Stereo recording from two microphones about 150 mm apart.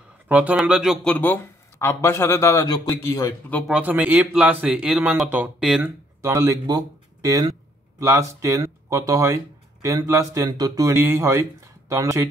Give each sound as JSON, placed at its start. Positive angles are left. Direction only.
{"t": 0.3, "sound": "speech", "side_deg": -10}
{"t": 1.0, "sound": "speech", "side_deg": 10}
{"t": 3.6, "sound": "speech", "side_deg": -10}
{"t": 6.2, "sound": "speech", "side_deg": -20}